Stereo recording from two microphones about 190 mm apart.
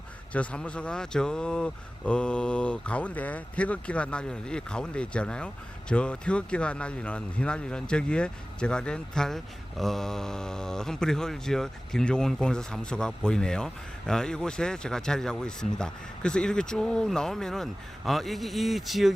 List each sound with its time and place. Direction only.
0.3 s speech: 5° left (ahead or behind)